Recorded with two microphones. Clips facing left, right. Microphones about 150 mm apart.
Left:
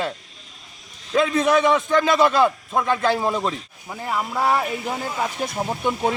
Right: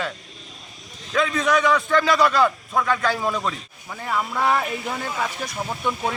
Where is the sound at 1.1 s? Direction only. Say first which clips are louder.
Left 3 dB; 30° left (ahead or behind).